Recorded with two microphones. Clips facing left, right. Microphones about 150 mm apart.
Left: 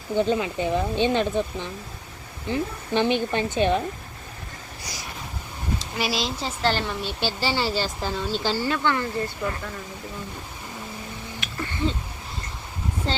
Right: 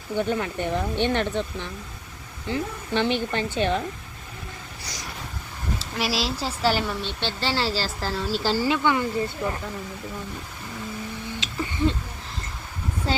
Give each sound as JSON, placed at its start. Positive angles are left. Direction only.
{"t": 0.2, "sound": "speech", "side_deg": 15}
{"t": 6.0, "sound": "a woman's voice", "side_deg": 0}
{"t": 7.0, "sound": "a woman's voice", "side_deg": 5}
{"t": 13.1, "sound": "speech", "side_deg": -5}